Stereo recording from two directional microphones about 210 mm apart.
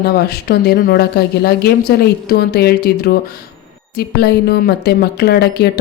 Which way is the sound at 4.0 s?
50° left (ahead or behind).